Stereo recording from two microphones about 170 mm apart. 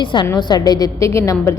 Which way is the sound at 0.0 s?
25° left (ahead or behind).